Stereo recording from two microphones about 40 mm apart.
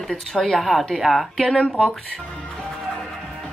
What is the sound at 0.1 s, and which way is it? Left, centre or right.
A woman's voice, centre.